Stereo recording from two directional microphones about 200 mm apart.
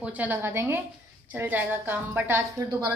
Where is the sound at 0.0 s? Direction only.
10° right (ahead or behind).